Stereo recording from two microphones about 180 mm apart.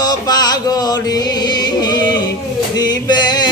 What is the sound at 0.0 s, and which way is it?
Music, 20° left (ahead or behind).